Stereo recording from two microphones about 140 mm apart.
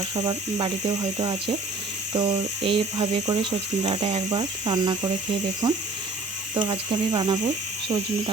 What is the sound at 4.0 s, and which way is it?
Speech, 55° right (ahead or behind).